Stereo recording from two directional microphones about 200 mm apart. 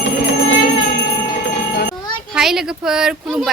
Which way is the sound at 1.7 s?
50° left (ahead or behind).